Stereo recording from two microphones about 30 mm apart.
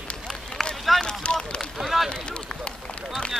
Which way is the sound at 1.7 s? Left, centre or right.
Centre.